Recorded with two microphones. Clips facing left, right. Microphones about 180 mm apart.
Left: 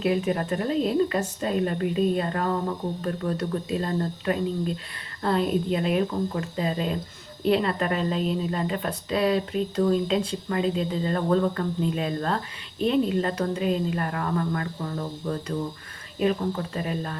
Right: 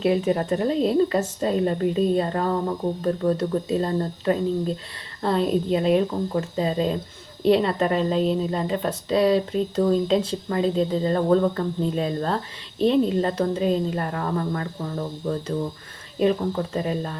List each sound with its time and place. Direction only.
0.0 s speech: 30° right (ahead or behind)